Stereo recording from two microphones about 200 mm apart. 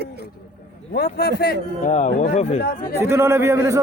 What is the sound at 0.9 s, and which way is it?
A man's voice, 50° left (ahead or behind).